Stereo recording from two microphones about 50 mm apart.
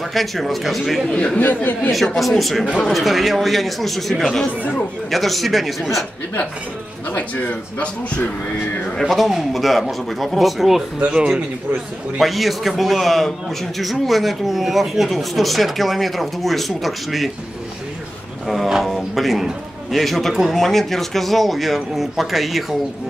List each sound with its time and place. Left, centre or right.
0.1 s speech: centre
1.1 s speech: left
1.4 s a man's voice: left
1.9 s speech: centre
7.2 s a man's voice: left
9.0 s speech: centre
11.0 s speech: right
12.2 s speech: centre
18.5 s speech: centre